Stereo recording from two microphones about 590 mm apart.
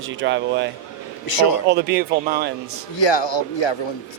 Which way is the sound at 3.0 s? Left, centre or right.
Left.